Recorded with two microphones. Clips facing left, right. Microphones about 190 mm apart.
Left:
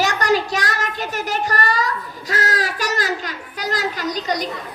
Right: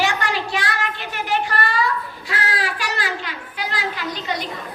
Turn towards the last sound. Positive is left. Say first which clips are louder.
# left 4 dB
turn(degrees=40)  # may be behind; listen again after turning